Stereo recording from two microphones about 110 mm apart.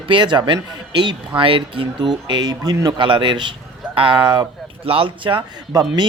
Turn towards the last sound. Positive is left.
turn(degrees=-35)  # may be behind; listen again after turning